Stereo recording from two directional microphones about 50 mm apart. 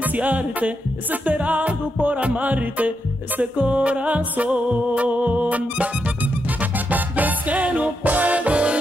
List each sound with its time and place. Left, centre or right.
0.0 s music: right